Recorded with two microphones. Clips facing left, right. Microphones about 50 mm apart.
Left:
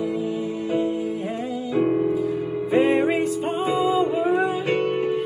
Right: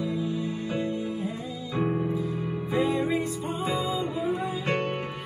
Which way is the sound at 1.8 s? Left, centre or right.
Left.